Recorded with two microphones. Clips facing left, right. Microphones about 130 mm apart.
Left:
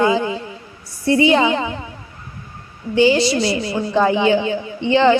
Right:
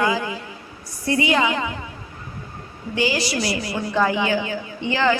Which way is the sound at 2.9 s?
25° left (ahead or behind).